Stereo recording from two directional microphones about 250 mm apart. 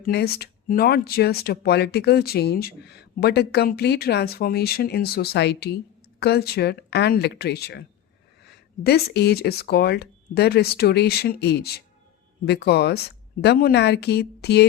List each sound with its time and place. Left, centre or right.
0.0 s speech: left